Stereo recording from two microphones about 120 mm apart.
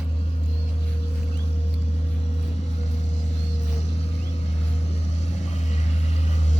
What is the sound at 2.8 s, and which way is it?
Vehicle, 70° left (ahead or behind).